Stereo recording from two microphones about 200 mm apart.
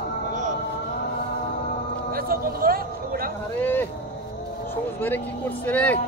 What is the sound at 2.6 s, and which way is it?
Speech, 45° right (ahead or behind).